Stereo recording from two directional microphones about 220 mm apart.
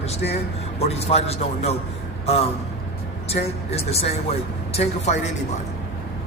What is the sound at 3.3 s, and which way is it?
A man's voice, 30° left (ahead or behind).